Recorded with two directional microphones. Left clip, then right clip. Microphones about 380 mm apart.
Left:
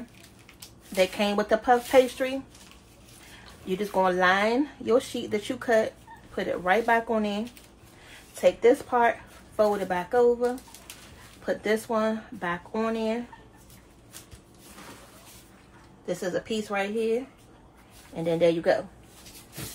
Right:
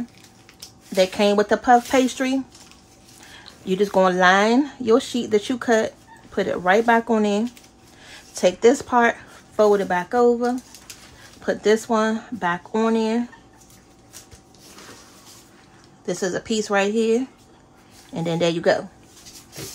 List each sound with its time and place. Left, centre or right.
0.9 s speech: right
3.6 s speech: right
16.1 s speech: right